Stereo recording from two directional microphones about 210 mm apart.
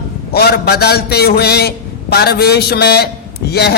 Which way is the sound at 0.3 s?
50° left (ahead or behind).